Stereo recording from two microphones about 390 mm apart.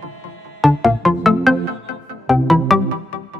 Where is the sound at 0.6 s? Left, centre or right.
Centre.